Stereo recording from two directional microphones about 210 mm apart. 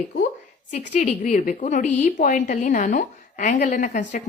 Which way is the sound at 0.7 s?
35° left (ahead or behind).